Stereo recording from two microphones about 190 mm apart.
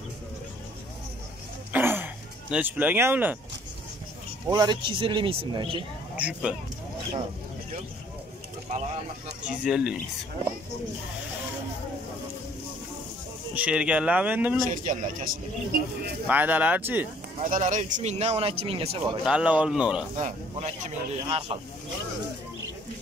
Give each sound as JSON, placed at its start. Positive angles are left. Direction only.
{"t": 1.7, "sound": "a sound", "side_deg": -10}
{"t": 2.5, "sound": "speech", "side_deg": -10}
{"t": 4.5, "sound": "speech", "side_deg": -20}
{"t": 6.1, "sound": "speech", "side_deg": -5}
{"t": 9.5, "sound": "speech", "side_deg": -5}
{"t": 13.6, "sound": "speech", "side_deg": -5}
{"t": 14.7, "sound": "speech", "side_deg": -45}
{"t": 16.3, "sound": "speech", "side_deg": -10}
{"t": 17.4, "sound": "speech", "side_deg": -40}
{"t": 19.2, "sound": "speech", "side_deg": -5}
{"t": 20.2, "sound": "speech", "side_deg": -40}